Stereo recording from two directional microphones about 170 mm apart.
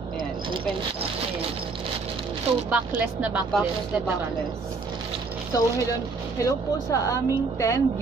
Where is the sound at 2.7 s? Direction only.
10° right (ahead or behind).